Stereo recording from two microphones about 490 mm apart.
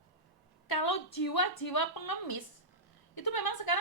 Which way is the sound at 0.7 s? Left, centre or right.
Left.